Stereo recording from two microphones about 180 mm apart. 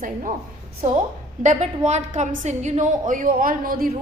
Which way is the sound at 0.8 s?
45° right (ahead or behind).